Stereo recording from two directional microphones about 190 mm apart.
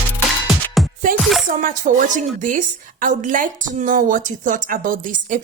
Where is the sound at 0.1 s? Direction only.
Centre (ahead or behind).